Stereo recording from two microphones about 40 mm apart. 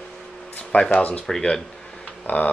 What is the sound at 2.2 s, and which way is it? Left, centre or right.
Speech, left.